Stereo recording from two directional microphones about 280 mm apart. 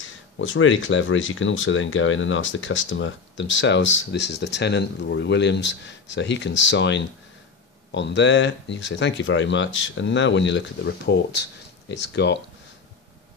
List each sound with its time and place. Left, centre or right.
0.0 s speech: left